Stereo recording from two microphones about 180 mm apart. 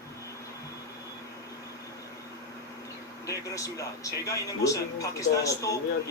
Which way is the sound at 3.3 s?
20° left (ahead or behind).